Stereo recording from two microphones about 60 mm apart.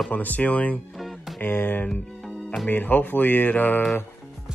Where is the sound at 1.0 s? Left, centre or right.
Centre.